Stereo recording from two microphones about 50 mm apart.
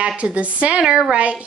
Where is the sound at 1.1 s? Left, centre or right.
Right.